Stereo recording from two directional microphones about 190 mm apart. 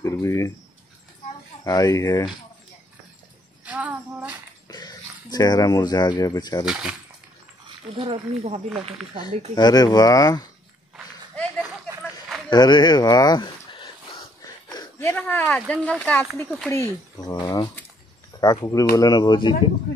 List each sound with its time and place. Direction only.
0.0 s a sound: 15° left (ahead or behind)
1.6 s speech: 20° left (ahead or behind)
3.6 s a sound: 5° right (ahead or behind)
4.6 s speech: 20° left (ahead or behind)
6.6 s speech: 5° right (ahead or behind)
8.0 s speech: 30° right (ahead or behind)
9.6 s speech: 20° left (ahead or behind)
12.4 s speech: 25° left (ahead or behind); by 16.7 s 5° left (ahead or behind)
16.7 s speech: 20° left (ahead or behind)